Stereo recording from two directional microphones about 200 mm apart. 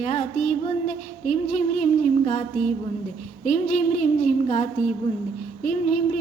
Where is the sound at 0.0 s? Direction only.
35° left (ahead or behind).